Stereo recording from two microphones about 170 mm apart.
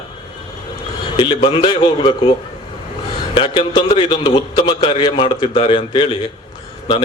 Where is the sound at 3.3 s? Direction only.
30° left (ahead or behind).